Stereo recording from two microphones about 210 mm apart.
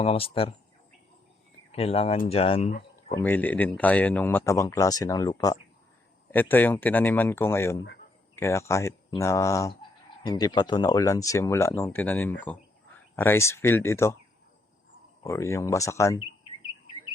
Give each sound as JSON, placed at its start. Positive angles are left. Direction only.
{"t": 0.0, "sound": "speech", "side_deg": 25}
{"t": 1.7, "sound": "speech", "side_deg": 30}
{"t": 3.1, "sound": "speech", "side_deg": 10}
{"t": 15.2, "sound": "speech", "side_deg": 15}